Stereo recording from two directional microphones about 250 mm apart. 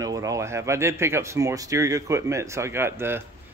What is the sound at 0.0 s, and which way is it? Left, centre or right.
Speech, centre.